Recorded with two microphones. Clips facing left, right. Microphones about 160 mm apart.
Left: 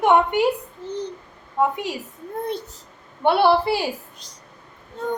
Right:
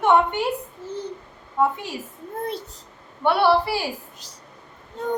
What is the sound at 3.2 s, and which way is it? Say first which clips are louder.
Speech: left 1 dB; 25° left (ahead or behind).